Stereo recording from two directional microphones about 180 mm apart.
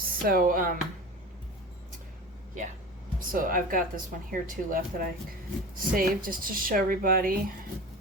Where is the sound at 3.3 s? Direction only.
50° right (ahead or behind).